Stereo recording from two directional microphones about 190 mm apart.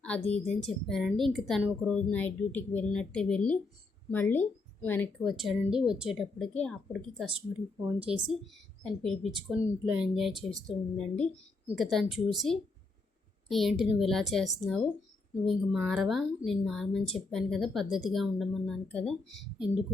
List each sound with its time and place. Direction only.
0.0 s a woman's voice: 5° left (ahead or behind)
5.2 s a woman's voice: centre (ahead or behind)
7.8 s a woman's voice: 30° right (ahead or behind)
8.8 s a woman's voice: centre (ahead or behind)